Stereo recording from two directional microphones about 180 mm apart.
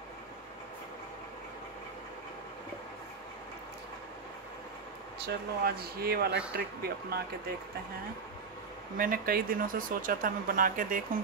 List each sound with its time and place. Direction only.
5.2 s speech: 60° right (ahead or behind)
8.9 s speech: 50° right (ahead or behind)